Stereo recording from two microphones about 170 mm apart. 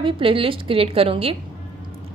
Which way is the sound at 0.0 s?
30° right (ahead or behind).